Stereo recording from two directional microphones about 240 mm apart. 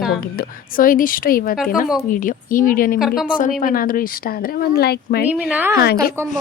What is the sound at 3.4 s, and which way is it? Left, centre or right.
Speech, left.